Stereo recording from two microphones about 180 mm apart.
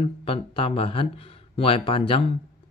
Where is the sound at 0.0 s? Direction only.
30° left (ahead or behind).